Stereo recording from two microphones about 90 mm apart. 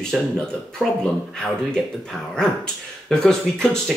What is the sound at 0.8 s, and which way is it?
Speech, 20° right (ahead or behind).